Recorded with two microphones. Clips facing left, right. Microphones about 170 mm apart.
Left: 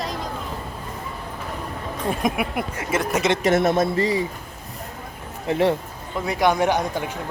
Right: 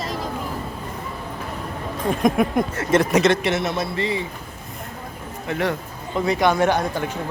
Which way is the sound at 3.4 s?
50° left (ahead or behind).